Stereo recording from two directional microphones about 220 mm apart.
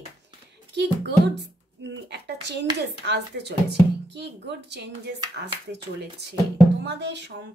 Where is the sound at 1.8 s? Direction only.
50° right (ahead or behind).